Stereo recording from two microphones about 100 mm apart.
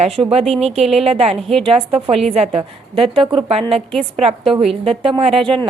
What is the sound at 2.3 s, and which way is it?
A woman's voice, 90° right.